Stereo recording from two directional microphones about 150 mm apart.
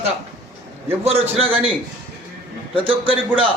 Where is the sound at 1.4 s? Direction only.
40° right (ahead or behind).